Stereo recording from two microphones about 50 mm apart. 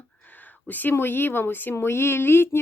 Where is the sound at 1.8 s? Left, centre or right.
Left.